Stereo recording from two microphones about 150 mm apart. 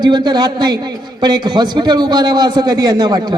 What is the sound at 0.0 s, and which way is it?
A man's voice, 30° right (ahead or behind).